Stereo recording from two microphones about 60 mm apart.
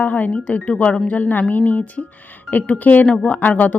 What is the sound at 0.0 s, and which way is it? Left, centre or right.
Speech, left.